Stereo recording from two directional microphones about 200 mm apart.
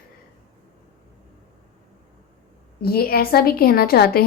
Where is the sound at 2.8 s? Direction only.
50° left (ahead or behind).